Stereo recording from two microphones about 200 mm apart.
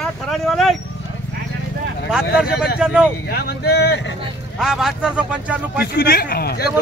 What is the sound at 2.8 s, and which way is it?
Speech, 5° right (ahead or behind).